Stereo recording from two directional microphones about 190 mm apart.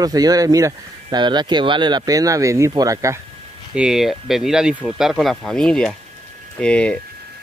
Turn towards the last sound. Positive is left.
turn(degrees=5)  # may be behind; listen again after turning